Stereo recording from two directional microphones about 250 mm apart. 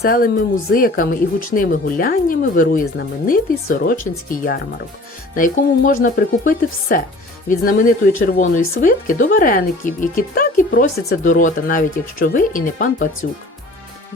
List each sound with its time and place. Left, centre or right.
0.0 s speech: left